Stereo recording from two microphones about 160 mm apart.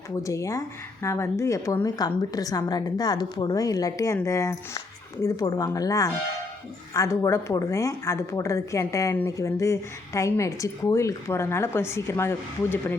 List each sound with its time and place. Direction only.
0.2 s a woman's voice: 20° left (ahead or behind)